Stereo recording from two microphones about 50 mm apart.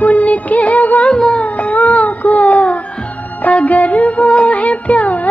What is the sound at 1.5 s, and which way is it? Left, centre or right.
Music, left.